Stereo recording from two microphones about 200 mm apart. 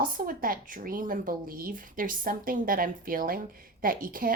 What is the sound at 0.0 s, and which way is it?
A woman's voice, 45° right (ahead or behind).